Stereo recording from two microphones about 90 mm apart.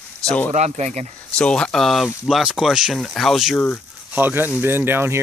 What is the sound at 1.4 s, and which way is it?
Speech, 10° left (ahead or behind).